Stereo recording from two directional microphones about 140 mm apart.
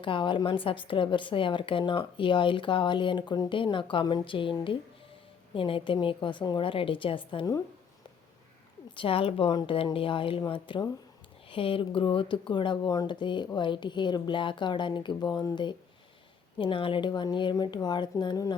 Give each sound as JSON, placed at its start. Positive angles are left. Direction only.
{"t": 0.0, "sound": "speech", "side_deg": 35}
{"t": 5.5, "sound": "speech", "side_deg": 40}
{"t": 9.0, "sound": "speech", "side_deg": 40}